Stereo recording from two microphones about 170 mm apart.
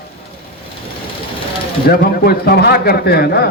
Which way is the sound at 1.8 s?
65° left (ahead or behind).